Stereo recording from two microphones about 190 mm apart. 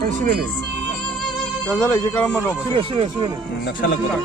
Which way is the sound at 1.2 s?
5° left (ahead or behind).